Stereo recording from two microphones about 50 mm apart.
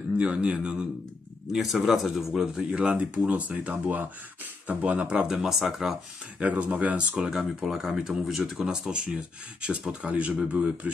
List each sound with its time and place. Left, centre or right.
0.2 s speech: right
1.5 s speech: centre
2.4 s speech: centre; by 5.0 s right
5.0 s speech: right
5.3 s speech: centre
6.4 s speech: right
7.2 s speech: centre
7.6 s speech: centre; by 10.9 s right